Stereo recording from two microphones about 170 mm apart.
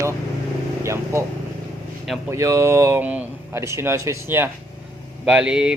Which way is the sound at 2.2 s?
20° right (ahead or behind).